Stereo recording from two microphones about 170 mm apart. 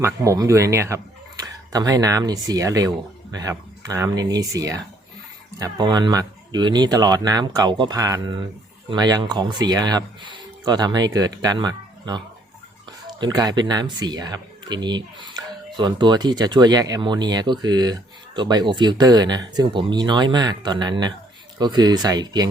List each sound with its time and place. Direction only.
0.0 s speech: 20° right (ahead or behind)